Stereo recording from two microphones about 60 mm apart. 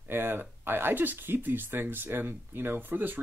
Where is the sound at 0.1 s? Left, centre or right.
Right.